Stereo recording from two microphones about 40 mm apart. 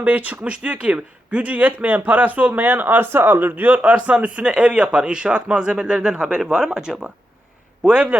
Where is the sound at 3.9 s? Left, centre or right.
Right.